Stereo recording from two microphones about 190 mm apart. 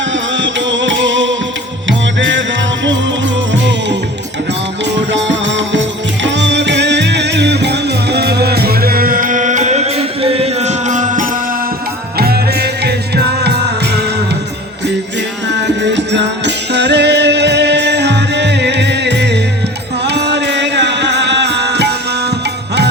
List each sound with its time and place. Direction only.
0.3 s music: 75° right (ahead or behind)
5.1 s music: 70° right (ahead or behind); by 11.3 s 40° right (ahead or behind)
12.1 s music: 55° right (ahead or behind)
15.5 s music: 65° right (ahead or behind)